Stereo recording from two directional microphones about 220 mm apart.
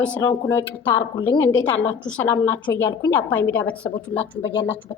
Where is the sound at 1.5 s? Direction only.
60° left (ahead or behind).